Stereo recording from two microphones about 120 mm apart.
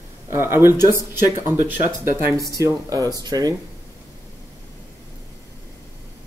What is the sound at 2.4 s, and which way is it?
Speech, 30° right (ahead or behind).